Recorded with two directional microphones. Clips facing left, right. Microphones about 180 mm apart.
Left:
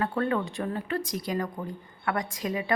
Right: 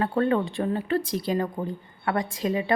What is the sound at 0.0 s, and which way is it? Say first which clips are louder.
Speech: right 4 dB; 30° right (ahead or behind).